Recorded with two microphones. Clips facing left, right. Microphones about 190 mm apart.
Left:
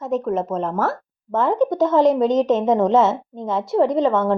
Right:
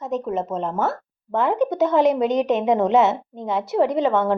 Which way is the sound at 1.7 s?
20° right (ahead or behind).